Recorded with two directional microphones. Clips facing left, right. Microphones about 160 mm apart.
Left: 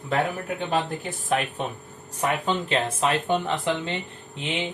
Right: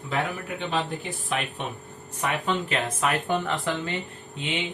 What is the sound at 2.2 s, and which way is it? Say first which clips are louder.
Speech: left 2 dB; 30° left (ahead or behind).